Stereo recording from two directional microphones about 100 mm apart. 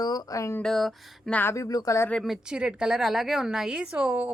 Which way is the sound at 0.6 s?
5° left (ahead or behind).